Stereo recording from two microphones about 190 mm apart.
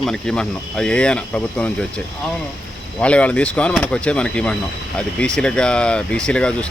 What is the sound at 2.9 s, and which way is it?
Speech, 5° left (ahead or behind).